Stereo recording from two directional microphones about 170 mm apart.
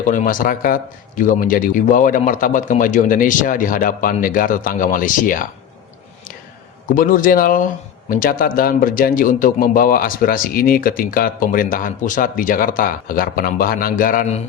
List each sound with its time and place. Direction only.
0.1 s speech: 55° left (ahead or behind)
6.9 s speech: 55° left (ahead or behind)